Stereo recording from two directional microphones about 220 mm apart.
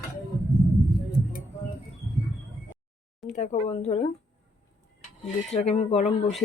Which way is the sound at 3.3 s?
30° left (ahead or behind).